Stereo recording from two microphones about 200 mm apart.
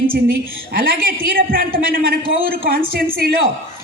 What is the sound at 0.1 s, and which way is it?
A woman's voice, 45° right (ahead or behind).